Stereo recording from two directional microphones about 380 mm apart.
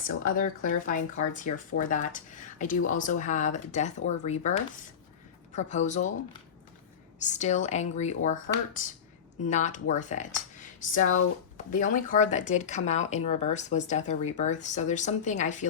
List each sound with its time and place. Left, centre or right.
0.3 s speech: left
7.2 s speech: centre